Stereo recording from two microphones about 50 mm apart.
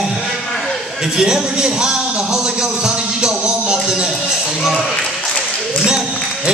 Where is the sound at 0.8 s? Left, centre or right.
Centre.